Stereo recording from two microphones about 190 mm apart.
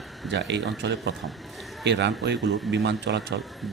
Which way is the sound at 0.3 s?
65° right (ahead or behind).